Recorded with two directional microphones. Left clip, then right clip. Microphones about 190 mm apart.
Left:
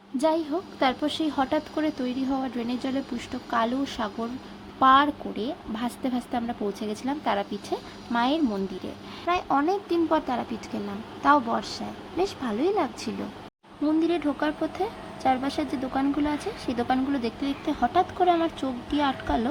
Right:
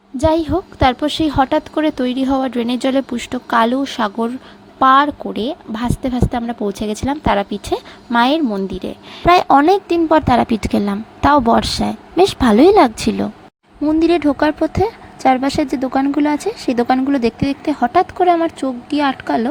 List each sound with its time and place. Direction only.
0.2 s a woman's voice: 40° right (ahead or behind)
13.8 s a woman's voice: 35° right (ahead or behind)